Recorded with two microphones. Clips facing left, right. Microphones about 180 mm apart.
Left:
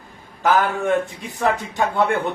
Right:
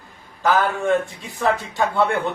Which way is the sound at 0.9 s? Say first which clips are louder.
Even; 20° left (ahead or behind).